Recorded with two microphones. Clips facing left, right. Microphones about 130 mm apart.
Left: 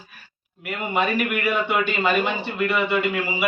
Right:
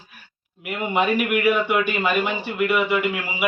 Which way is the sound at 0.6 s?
15° right (ahead or behind).